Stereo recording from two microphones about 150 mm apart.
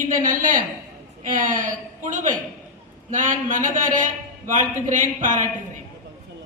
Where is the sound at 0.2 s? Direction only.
60° right (ahead or behind).